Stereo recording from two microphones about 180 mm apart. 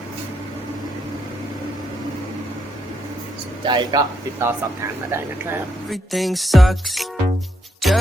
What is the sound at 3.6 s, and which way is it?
Speech, 25° right (ahead or behind).